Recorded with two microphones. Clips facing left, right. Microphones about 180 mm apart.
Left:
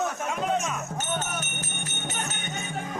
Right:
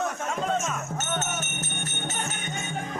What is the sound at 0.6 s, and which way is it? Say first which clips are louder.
Speech: even; centre (ahead or behind).